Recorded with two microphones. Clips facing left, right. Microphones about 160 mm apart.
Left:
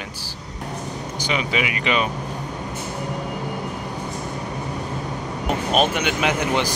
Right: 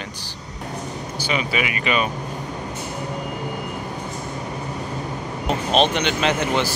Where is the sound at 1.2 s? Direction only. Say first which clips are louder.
Even; 15° left (ahead or behind).